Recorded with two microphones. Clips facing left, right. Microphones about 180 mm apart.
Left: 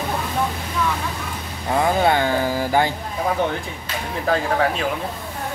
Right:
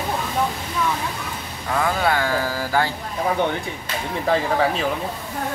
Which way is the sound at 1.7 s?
25° left (ahead or behind).